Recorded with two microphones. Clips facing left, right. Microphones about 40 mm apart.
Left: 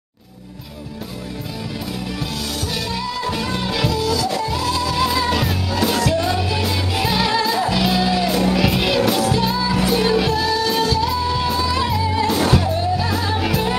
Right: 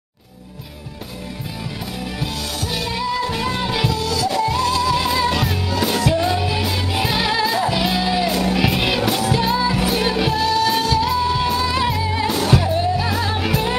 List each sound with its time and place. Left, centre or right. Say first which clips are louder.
2.1 s music: even; centre